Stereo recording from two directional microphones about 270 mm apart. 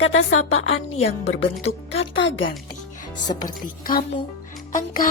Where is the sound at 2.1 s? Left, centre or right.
Left.